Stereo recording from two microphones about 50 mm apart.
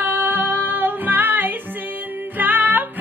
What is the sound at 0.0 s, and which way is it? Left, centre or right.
Music, right.